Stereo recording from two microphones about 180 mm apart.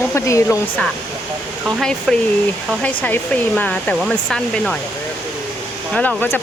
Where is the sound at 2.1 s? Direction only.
Centre (ahead or behind).